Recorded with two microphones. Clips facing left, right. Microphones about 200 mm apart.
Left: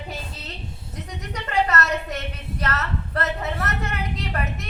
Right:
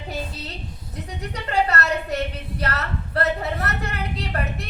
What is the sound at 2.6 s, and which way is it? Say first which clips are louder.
A woman's voice: even; 35° right (ahead or behind).